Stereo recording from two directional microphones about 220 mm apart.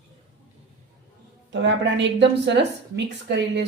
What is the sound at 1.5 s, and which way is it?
A woman's voice, 55° right (ahead or behind).